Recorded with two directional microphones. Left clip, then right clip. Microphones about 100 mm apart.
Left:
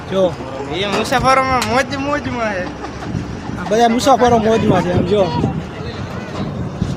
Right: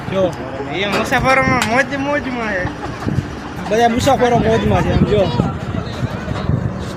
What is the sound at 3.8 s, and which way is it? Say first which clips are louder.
Speech: left 2 dB; 65° left (ahead or behind).